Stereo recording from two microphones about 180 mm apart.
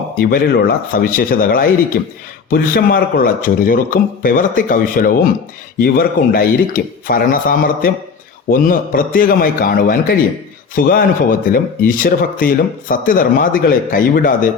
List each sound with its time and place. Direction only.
0.2 s speech: 55° left (ahead or behind)